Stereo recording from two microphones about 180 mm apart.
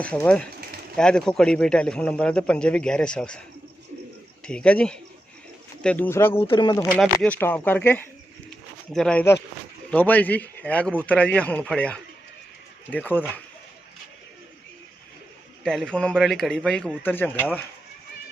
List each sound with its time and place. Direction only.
0.0 s a man's voice: 5° left (ahead or behind)
4.4 s a man's voice: 5° left (ahead or behind)
6.5 s speech: 25° left (ahead or behind)
7.0 s a man's voice: 5° left (ahead or behind)
15.6 s a man's voice: 5° left (ahead or behind)